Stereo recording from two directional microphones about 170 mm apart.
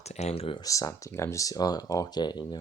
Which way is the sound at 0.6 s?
20° left (ahead or behind).